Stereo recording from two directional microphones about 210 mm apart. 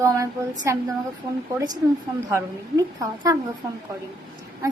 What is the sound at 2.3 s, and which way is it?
A woman's voice, 15° right (ahead or behind).